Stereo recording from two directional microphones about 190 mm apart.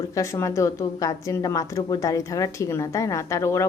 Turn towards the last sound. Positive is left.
turn(degrees=15)  # may be behind; listen again after turning